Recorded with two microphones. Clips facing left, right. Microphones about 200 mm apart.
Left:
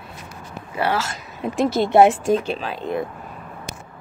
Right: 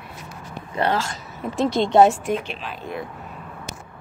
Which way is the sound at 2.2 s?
35° left (ahead or behind).